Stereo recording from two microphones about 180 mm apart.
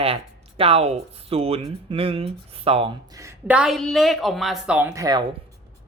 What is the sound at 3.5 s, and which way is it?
Speech, 5° right (ahead or behind).